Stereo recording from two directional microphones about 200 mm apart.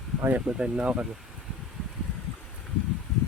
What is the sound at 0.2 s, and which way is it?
Speech, 10° right (ahead or behind).